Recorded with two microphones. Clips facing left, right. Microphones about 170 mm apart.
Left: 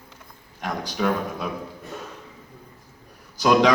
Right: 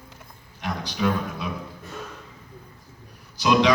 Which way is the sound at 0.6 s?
45° left (ahead or behind).